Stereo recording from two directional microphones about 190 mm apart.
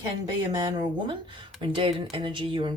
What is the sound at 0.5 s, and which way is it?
Speech, 25° right (ahead or behind).